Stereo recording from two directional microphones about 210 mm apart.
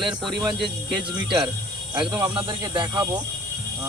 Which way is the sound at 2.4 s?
20° right (ahead or behind).